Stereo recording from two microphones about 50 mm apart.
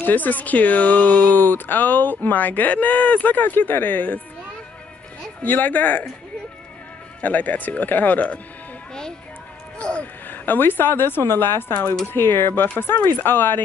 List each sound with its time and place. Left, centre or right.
0.0 s speech: left
5.4 s speech: left
7.2 s speech: left
9.8 s speech: left
10.2 s speech: left